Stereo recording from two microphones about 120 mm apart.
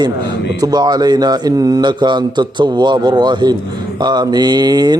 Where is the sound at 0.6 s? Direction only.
35° right (ahead or behind).